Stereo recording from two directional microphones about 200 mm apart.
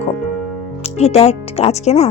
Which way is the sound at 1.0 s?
30° left (ahead or behind).